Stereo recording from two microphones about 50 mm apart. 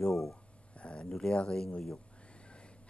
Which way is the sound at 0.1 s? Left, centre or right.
Centre.